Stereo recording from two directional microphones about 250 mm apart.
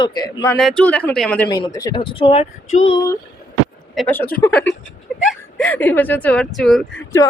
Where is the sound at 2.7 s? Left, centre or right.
Left.